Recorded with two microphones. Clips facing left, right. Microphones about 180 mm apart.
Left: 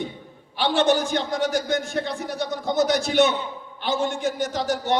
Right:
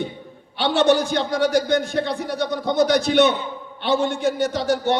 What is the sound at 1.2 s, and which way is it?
A man's voice, 60° right (ahead or behind).